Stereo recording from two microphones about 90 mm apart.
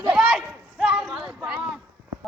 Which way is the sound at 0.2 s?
5° right (ahead or behind).